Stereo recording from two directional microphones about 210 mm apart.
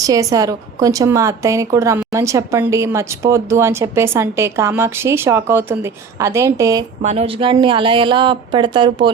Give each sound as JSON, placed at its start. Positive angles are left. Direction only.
{"t": 0.0, "sound": "speech", "side_deg": -15}
{"t": 7.0, "sound": "speech", "side_deg": -30}